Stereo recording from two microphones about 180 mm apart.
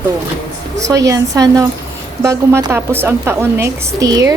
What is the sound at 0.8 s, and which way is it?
A woman's voice, 15° right (ahead or behind).